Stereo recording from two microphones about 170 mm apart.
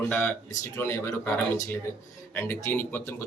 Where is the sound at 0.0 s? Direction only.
10° left (ahead or behind).